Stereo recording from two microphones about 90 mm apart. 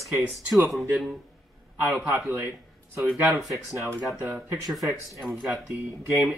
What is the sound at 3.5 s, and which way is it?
Speech, 35° right (ahead or behind).